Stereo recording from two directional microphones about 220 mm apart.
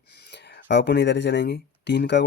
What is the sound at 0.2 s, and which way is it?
Speech, 50° left (ahead or behind).